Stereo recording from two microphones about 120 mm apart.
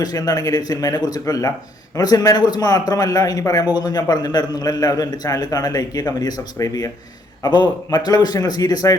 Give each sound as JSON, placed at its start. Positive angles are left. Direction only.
{"t": 0.0, "sound": "a man's voice", "side_deg": 30}